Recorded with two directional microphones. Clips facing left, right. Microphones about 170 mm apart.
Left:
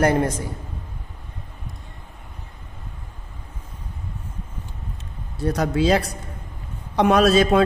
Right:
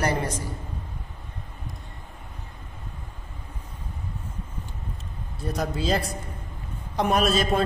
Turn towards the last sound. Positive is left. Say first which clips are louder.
# left 6 dB
turn(degrees=70)  # may be behind; listen again after turning